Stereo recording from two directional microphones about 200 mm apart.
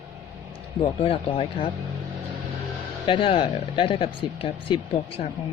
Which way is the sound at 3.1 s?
25° left (ahead or behind).